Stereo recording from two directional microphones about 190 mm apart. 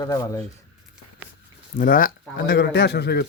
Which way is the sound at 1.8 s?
50° left (ahead or behind).